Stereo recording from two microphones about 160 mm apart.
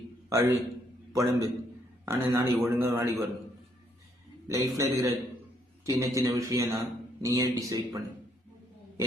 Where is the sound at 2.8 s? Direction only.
15° right (ahead or behind).